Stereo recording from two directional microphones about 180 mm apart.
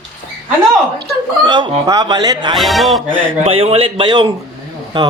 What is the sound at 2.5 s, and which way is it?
Speech, centre (ahead or behind).